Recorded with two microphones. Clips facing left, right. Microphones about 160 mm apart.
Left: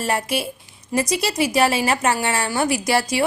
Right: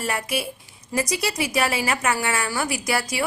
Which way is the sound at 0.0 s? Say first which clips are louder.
Left 4 dB; 25° left (ahead or behind).